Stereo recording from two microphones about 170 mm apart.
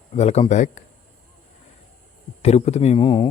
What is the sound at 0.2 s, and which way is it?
Speech, 40° left (ahead or behind).